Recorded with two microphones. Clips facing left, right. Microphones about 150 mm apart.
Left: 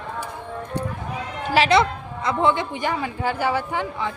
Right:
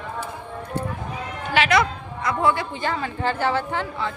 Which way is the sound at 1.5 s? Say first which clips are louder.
Left 2 dB; 30° left (ahead or behind).